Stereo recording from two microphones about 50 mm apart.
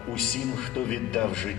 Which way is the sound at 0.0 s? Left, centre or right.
Centre.